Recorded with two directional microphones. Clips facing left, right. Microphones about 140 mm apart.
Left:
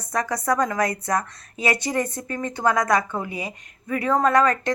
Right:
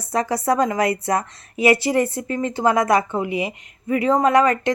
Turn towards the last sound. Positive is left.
turn(degrees=-20)  # may be behind; listen again after turning